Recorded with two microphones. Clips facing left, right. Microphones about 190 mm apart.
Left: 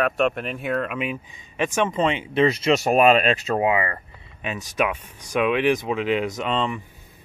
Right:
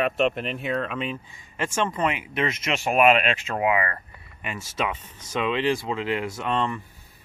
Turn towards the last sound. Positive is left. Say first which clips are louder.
# left 2 dB
turn(degrees=15)  # may be behind; listen again after turning